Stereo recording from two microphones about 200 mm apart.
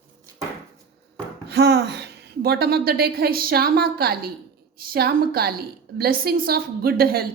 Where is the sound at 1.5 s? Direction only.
55° right (ahead or behind).